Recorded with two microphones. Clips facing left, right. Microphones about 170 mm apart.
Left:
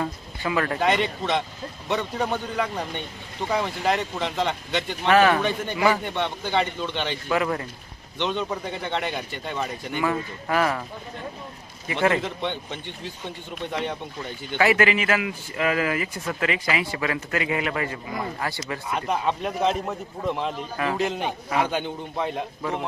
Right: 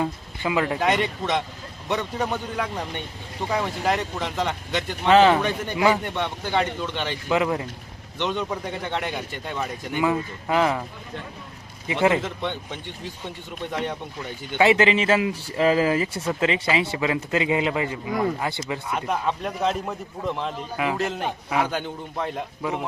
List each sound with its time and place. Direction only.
0.0 s speech: 15° right (ahead or behind)
0.8 s a man's voice: 5° right (ahead or behind)
5.0 s a man's voice: 20° right (ahead or behind)
5.4 s a man's voice: 10° right (ahead or behind)
9.9 s speech: 15° right (ahead or behind)
11.9 s speech: 15° right (ahead or behind)
12.2 s a man's voice: 5° right (ahead or behind)
14.5 s a man's voice: 25° right (ahead or behind)
18.9 s a man's voice: centre (ahead or behind)